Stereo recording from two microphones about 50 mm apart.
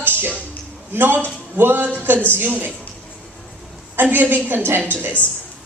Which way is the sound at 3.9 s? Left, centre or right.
Right.